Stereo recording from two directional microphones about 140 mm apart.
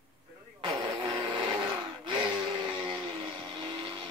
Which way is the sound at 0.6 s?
35° right (ahead or behind).